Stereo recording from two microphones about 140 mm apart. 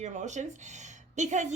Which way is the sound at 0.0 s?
60° right (ahead or behind).